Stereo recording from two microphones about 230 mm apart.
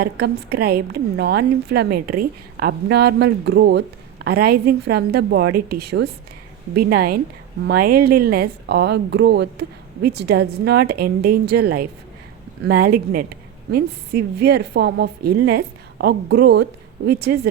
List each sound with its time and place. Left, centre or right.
0.0 s a woman's voice: right